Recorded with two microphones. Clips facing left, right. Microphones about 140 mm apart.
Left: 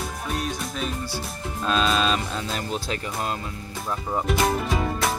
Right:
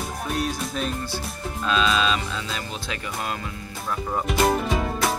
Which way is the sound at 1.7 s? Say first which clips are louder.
Even; 45° left (ahead or behind).